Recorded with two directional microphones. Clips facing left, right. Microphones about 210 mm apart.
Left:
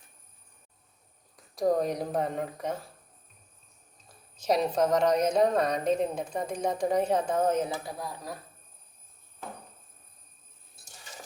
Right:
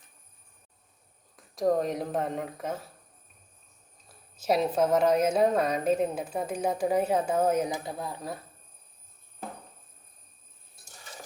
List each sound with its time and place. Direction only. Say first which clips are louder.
1.4 s speech: even; centre (ahead or behind)
4.4 s a woman's voice: right 1 dB; 5° right (ahead or behind)
7.9 s speech: right 2 dB; 25° right (ahead or behind)